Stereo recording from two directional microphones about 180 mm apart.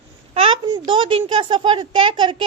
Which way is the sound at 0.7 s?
30° right (ahead or behind).